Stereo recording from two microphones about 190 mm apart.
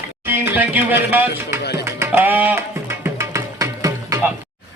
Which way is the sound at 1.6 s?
60° left (ahead or behind).